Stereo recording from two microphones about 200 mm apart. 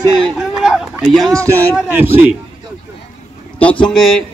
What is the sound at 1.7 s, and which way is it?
Speech, 10° right (ahead or behind).